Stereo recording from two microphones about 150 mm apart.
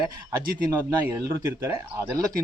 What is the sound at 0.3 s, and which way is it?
Speech, 20° right (ahead or behind).